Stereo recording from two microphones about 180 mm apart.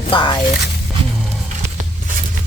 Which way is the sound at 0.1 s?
30° left (ahead or behind).